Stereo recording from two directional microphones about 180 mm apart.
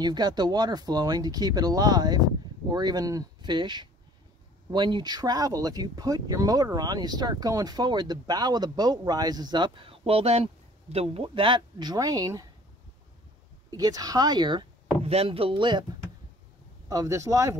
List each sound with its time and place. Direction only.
0.0 s speech: 25° right (ahead or behind)
13.7 s speech: 20° right (ahead or behind)